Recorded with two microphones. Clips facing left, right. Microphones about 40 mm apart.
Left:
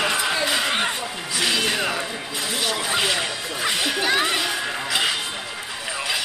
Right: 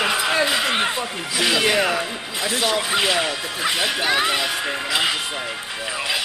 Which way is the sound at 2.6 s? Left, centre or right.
Centre.